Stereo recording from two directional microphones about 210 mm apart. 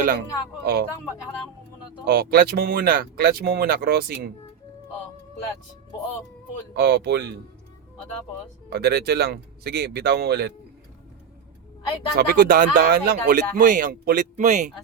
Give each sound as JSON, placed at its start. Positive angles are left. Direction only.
{"t": 0.6, "sound": "speech", "side_deg": -50}
{"t": 2.0, "sound": "speech", "side_deg": -45}
{"t": 6.7, "sound": "speech", "side_deg": -50}
{"t": 8.7, "sound": "speech", "side_deg": -50}
{"t": 12.1, "sound": "speech", "side_deg": -45}